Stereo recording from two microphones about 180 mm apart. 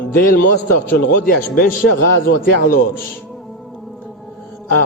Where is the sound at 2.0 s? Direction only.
55° left (ahead or behind).